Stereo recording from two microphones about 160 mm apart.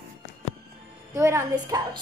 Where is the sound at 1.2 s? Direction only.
15° right (ahead or behind).